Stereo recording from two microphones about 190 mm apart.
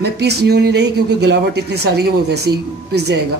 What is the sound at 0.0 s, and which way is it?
Speech, 60° right (ahead or behind).